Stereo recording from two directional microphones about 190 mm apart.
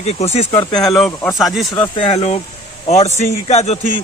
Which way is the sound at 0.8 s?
Centre (ahead or behind).